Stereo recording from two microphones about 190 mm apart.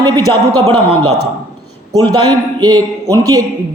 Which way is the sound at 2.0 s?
20° right (ahead or behind).